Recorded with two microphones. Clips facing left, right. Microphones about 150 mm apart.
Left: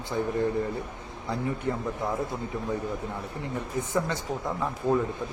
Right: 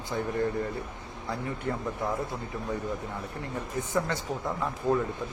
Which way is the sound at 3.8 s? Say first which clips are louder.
Left 1 dB; 20° left (ahead or behind).